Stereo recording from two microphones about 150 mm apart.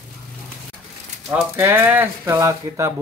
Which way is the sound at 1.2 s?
15° right (ahead or behind).